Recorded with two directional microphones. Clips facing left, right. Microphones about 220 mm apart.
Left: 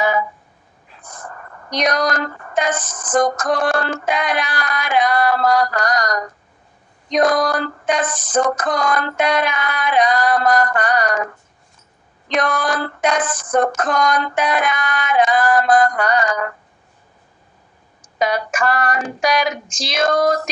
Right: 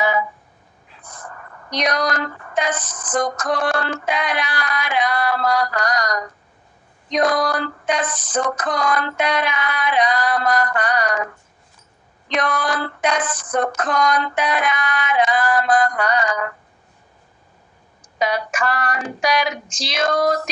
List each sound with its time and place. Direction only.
1.0 s speech: 45° left (ahead or behind)
7.1 s female singing: 45° left (ahead or behind)
12.3 s female singing: 45° left (ahead or behind)
18.2 s female singing: 45° left (ahead or behind)